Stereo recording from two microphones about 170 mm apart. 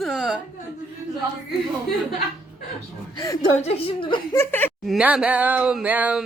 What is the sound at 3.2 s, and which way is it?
Speech, 20° left (ahead or behind).